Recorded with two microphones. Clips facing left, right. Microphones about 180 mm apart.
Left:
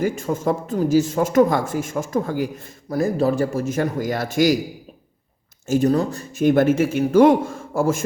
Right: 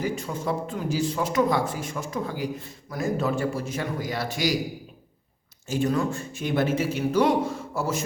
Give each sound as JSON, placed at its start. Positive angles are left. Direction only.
{"t": 0.0, "sound": "speech", "side_deg": 45}
{"t": 2.9, "sound": "speech", "side_deg": 35}
{"t": 5.6, "sound": "speech", "side_deg": 45}